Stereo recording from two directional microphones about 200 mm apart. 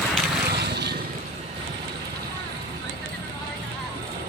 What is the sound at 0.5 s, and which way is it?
Boat, 55° right (ahead or behind).